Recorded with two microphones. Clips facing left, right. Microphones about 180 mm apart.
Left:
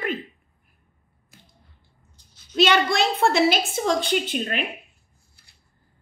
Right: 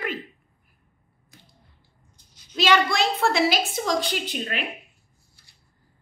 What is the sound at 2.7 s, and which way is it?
Speech, 25° left (ahead or behind).